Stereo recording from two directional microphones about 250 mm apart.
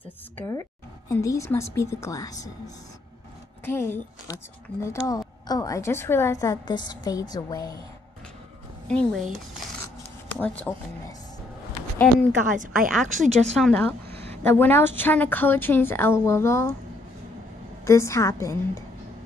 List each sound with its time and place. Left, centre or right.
0.5 s a woman's voice: centre
8.8 s a woman's voice: centre
12.4 s a woman's voice: right
13.5 s a woman's voice: centre
17.8 s a woman's voice: centre